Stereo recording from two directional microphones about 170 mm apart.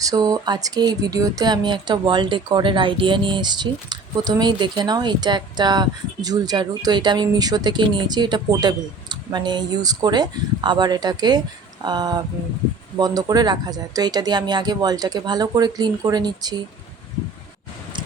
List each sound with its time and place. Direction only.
0.0 s speech: 20° right (ahead or behind)